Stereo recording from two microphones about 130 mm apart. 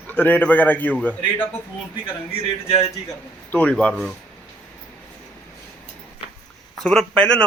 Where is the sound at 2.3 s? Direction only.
55° left (ahead or behind).